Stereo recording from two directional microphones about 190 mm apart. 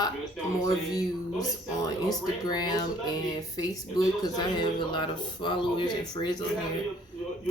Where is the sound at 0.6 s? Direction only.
20° left (ahead or behind).